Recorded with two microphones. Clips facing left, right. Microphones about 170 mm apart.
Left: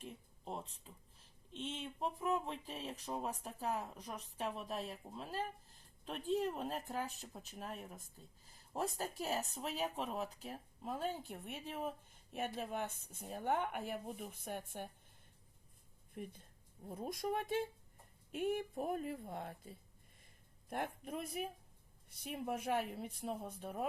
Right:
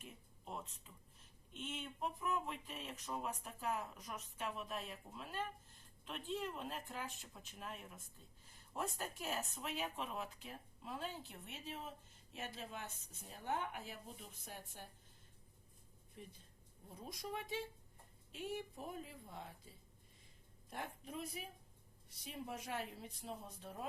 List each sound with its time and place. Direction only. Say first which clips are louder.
0.0 s speech: left 6 dB; 30° left (ahead or behind); by 14.8 s 60° left (ahead or behind)
16.2 s speech: left 8 dB; 55° left (ahead or behind)